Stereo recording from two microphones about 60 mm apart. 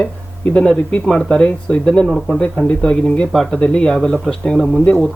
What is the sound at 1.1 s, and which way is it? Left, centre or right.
Speech, centre.